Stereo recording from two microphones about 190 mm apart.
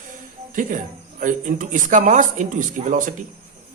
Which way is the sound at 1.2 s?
45° right (ahead or behind).